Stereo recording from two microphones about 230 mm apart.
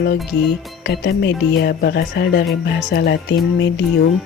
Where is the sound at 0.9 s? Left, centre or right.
Left.